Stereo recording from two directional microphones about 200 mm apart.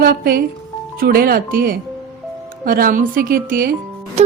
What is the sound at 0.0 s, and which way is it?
Speech, 45° right (ahead or behind).